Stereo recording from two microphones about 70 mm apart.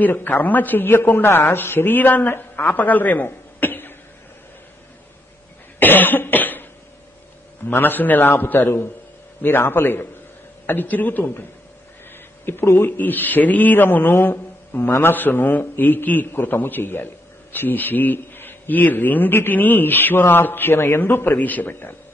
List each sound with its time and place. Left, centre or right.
0.0 s a man's voice: left
5.8 s cough: left
7.7 s a man's voice: left
12.6 s a man's voice: left